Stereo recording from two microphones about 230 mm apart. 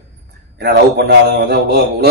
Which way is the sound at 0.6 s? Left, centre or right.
Right.